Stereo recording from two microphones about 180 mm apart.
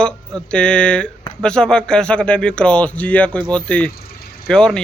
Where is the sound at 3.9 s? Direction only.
60° left (ahead or behind).